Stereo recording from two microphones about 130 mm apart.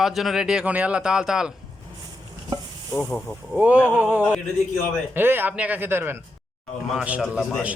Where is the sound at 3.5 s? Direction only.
10° right (ahead or behind).